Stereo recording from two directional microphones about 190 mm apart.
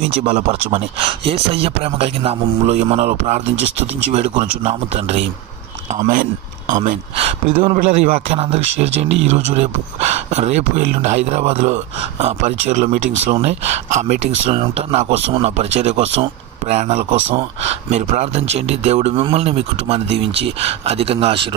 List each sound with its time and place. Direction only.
0.2 s speech: 30° right (ahead or behind)
6.7 s speech: 35° right (ahead or behind)